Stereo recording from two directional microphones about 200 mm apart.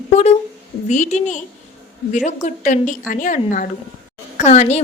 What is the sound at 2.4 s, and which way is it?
A woman's voice, 40° left (ahead or behind).